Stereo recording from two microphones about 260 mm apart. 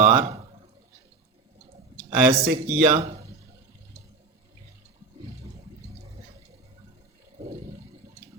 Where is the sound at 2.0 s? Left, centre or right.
Right.